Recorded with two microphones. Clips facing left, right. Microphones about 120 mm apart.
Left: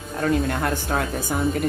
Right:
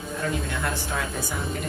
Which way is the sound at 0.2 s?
50° left (ahead or behind).